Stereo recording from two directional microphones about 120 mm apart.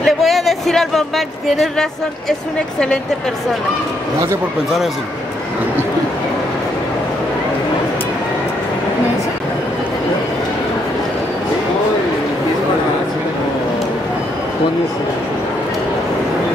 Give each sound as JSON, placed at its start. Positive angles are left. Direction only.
{"t": 0.0, "sound": "speech", "side_deg": 0}